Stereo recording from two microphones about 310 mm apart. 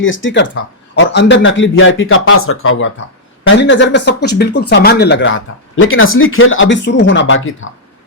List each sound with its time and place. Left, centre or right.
0.0 s speech: left